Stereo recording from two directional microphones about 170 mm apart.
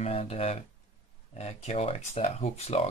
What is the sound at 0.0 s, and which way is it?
Speech, 40° left (ahead or behind).